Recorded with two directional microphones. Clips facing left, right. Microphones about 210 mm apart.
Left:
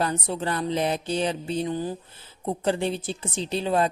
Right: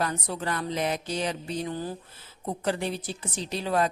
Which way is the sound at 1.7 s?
15° left (ahead or behind).